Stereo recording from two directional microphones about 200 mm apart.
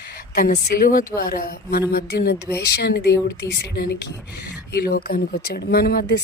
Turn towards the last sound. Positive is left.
turn(degrees=50)  # may be behind; listen again after turning